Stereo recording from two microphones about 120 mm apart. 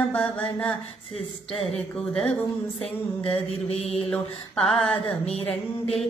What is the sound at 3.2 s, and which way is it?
Mantra, 55° left (ahead or behind).